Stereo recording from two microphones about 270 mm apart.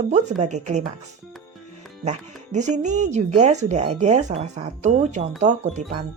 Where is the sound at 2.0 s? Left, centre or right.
Right.